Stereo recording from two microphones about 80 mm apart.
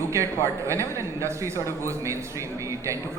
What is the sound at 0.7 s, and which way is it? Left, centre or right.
A man's voice, right.